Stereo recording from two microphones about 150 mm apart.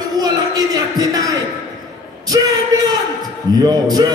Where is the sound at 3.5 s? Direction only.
25° right (ahead or behind).